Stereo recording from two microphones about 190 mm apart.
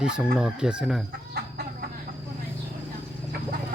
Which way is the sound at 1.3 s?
60° right (ahead or behind).